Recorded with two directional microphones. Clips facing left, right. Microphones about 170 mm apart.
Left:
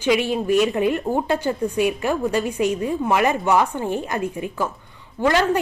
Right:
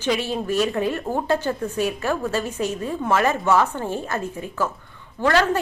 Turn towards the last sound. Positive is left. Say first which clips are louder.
# left 1 dB
turn(degrees=15)  # may be behind; listen again after turning